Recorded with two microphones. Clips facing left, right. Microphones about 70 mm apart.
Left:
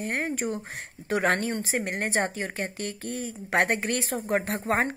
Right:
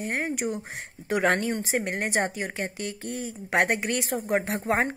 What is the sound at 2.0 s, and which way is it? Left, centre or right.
Speech, right.